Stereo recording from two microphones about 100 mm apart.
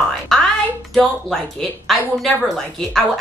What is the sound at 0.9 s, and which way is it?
Speech, 5° left (ahead or behind).